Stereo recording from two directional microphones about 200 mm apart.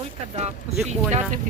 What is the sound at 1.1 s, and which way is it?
Speech, 35° right (ahead or behind).